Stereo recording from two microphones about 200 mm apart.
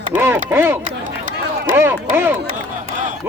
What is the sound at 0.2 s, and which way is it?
Speech, 10° right (ahead or behind).